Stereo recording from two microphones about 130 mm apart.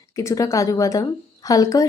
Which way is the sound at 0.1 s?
25° left (ahead or behind).